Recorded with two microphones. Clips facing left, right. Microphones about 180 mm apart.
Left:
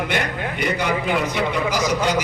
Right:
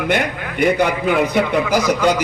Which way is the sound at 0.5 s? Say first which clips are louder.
Right 7 dB; 55° right (ahead or behind).